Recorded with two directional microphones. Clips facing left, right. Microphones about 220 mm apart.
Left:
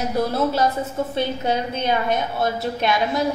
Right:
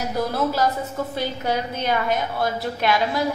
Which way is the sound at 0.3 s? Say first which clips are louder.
Left 2 dB; 25° left (ahead or behind).